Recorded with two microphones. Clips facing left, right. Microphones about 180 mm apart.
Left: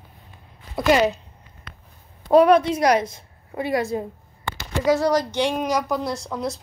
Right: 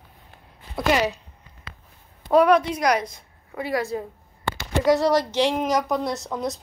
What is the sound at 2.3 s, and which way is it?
A woman's voice, 30° left (ahead or behind).